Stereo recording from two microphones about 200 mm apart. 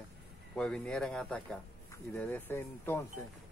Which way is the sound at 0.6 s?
5° left (ahead or behind).